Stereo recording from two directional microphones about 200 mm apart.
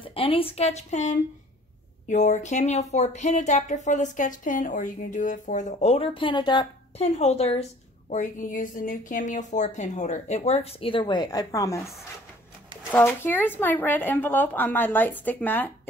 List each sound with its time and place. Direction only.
0.0 s speech: 25° left (ahead or behind)
12.9 s speech: 10° left (ahead or behind)